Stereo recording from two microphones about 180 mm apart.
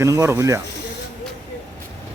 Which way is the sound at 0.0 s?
15° right (ahead or behind).